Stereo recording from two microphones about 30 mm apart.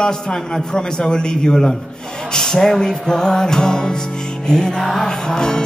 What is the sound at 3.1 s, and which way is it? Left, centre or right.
Music, left.